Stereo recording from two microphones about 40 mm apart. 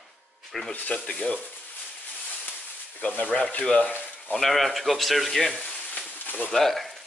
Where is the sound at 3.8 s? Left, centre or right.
Left.